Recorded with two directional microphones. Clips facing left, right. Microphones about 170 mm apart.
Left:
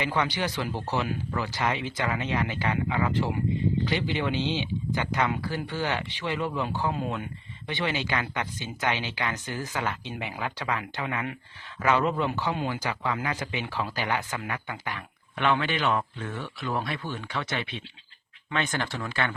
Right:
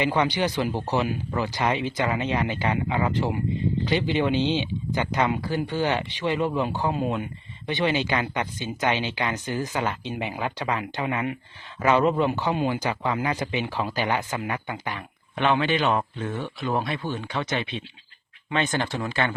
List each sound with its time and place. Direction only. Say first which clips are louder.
0.0 s a man's voice: right 5 dB; 20° right (ahead or behind)